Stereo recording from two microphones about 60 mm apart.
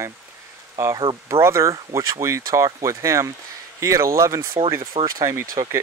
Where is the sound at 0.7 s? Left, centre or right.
Right.